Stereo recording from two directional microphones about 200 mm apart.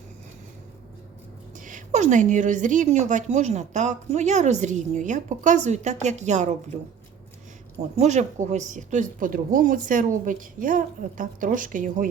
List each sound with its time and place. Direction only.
1.5 s a woman's voice: 40° right (ahead or behind)
7.9 s a woman's voice: 35° right (ahead or behind)